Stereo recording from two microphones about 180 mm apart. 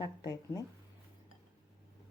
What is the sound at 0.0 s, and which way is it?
Speech, 20° left (ahead or behind).